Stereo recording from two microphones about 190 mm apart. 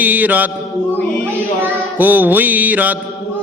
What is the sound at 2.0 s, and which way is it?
Mantra, 10° right (ahead or behind).